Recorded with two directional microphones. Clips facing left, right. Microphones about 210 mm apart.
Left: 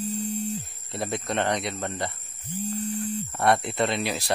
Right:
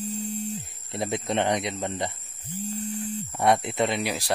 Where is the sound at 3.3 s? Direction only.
15° right (ahead or behind).